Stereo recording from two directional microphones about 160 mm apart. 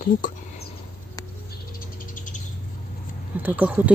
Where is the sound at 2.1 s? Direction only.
55° left (ahead or behind).